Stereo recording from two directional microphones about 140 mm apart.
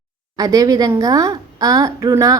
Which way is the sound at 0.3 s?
25° right (ahead or behind).